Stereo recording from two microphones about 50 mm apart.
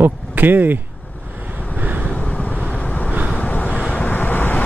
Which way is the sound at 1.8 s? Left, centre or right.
Right.